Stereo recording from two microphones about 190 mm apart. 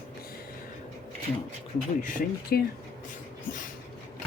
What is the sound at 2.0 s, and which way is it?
Speech, 45° left (ahead or behind).